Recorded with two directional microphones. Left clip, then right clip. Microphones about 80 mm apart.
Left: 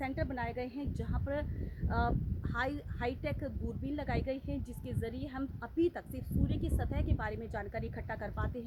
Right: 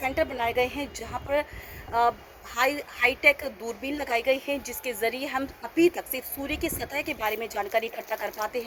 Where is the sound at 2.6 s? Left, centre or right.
Left.